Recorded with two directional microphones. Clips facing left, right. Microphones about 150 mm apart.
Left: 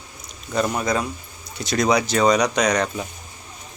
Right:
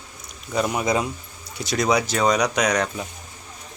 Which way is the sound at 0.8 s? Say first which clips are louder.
Right 1 dB; 20° right (ahead or behind).